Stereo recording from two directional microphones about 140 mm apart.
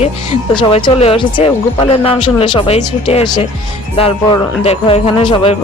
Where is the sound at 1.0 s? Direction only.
40° left (ahead or behind).